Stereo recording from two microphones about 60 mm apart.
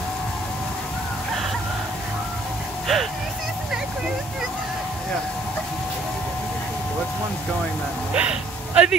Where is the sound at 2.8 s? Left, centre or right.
Centre.